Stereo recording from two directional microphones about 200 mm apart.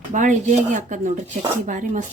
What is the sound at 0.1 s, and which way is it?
Speech, 40° right (ahead or behind).